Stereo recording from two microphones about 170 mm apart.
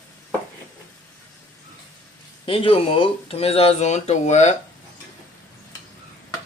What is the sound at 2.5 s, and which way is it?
Speech, 35° left (ahead or behind).